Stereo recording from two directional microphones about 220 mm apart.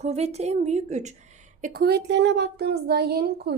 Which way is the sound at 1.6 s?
45° right (ahead or behind).